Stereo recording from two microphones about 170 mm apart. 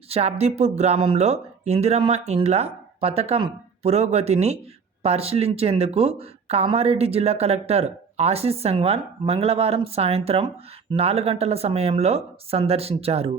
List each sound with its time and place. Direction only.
0.1 s speech: 40° right (ahead or behind)